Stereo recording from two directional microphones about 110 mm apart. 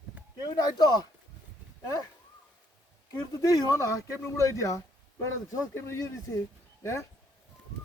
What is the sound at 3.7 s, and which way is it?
Speech, 30° left (ahead or behind).